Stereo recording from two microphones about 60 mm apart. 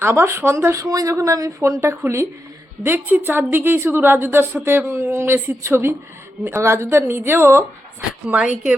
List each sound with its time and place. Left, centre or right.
0.0 s speech: right
0.9 s a woman's voice: right
2.0 s a woman's voice: right
7.1 s a woman's voice: right
8.4 s speech: right